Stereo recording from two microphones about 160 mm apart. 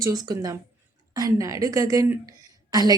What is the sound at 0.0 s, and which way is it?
A woman's voice, 25° right (ahead or behind).